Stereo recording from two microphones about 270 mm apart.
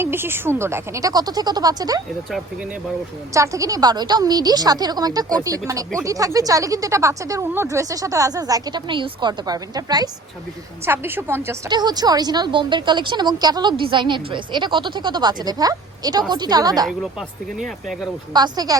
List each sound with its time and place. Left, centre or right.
0.0 s a woman's voice: centre
3.3 s a woman's voice: centre
17.0 s speech: centre
18.3 s a woman's voice: centre